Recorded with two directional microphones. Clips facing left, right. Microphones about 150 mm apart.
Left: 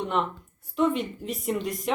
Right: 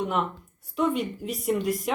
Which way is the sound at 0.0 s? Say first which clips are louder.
Even; centre (ahead or behind).